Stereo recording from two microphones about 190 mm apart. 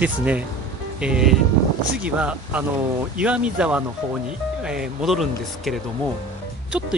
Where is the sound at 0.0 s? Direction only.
10° right (ahead or behind).